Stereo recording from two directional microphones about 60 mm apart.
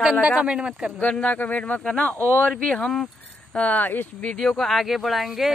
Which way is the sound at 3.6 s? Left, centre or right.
Left.